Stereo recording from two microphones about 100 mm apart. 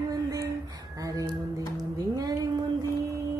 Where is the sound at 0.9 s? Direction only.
35° right (ahead or behind).